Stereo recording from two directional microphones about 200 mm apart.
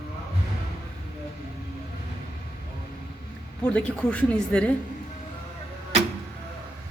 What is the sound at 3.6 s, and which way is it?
Speech, 5° left (ahead or behind).